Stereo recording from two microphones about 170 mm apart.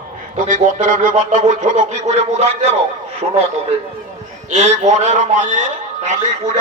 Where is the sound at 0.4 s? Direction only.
45° right (ahead or behind).